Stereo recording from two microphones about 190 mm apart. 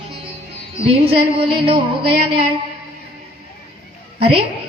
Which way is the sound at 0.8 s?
30° right (ahead or behind).